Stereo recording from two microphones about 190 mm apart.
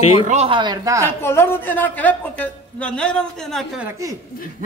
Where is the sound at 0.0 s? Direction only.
30° left (ahead or behind).